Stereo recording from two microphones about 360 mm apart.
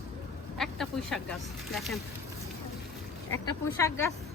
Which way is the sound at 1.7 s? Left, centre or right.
Centre.